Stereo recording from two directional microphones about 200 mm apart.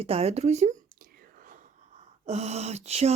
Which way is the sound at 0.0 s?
30° right (ahead or behind).